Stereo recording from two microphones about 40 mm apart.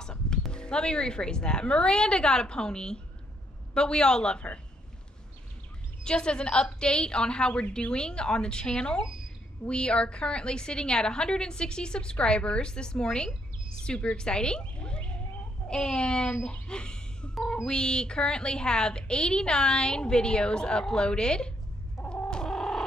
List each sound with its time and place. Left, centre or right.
0.0 s a sound: centre
0.5 s a woman's voice: left
6.0 s a woman's voice: left
22.0 s chicken: left